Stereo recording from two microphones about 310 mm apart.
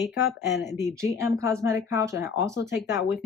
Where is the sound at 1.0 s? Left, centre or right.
Centre.